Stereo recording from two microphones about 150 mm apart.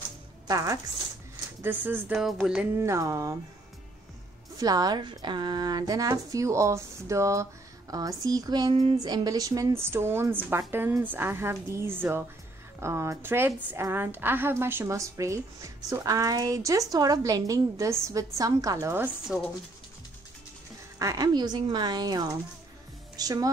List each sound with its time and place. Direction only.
0.5 s a woman's voice: 25° right (ahead or behind)
2.1 s music: 5° right (ahead or behind)
2.8 s a woman's voice: 20° right (ahead or behind)
4.6 s a woman's voice: 25° right (ahead or behind); by 19.5 s 10° right (ahead or behind)
21.0 s a woman's voice: 20° right (ahead or behind)